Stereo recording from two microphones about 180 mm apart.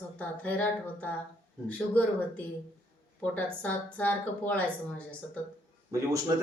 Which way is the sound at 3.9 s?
10° left (ahead or behind).